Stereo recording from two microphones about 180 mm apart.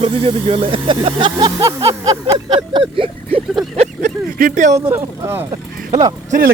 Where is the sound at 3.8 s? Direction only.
45° right (ahead or behind).